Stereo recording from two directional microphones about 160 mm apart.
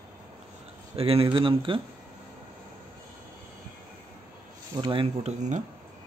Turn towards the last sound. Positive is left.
turn(degrees=-50)  # may be behind; listen again after turning